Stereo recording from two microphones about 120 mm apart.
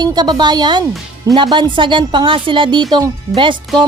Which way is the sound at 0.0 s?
35° right (ahead or behind).